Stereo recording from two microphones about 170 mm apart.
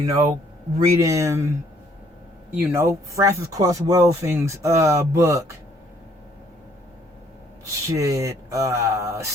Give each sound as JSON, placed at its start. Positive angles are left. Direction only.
{"t": 0.0, "sound": "speech", "side_deg": -20}
{"t": 2.6, "sound": "speech", "side_deg": -15}
{"t": 7.7, "sound": "speech", "side_deg": -20}